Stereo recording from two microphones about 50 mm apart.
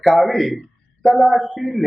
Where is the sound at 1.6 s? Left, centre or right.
Centre.